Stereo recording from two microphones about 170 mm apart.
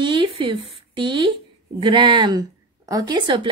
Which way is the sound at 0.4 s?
30° right (ahead or behind).